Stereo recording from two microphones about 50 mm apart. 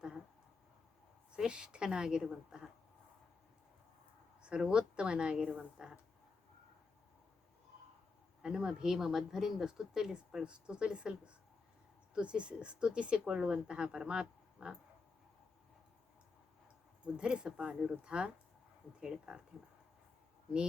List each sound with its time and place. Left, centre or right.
1.3 s speech: centre
2.5 s a sound: centre
4.4 s speech: centre
8.4 s speech: centre
12.1 s speech: right
17.2 s speech: centre